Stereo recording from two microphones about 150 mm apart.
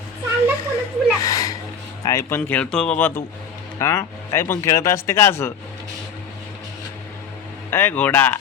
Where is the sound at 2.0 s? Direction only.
20° left (ahead or behind).